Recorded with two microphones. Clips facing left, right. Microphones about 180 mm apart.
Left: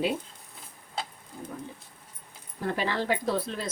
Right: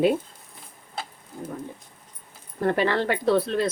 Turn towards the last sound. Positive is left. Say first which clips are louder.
# right 8 dB
turn(degrees=-70)  # may be behind; listen again after turning